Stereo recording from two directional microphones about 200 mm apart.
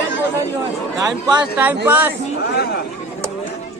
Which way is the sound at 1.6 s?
10° right (ahead or behind).